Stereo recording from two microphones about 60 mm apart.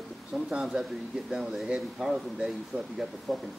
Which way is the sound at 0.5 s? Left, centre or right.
Centre.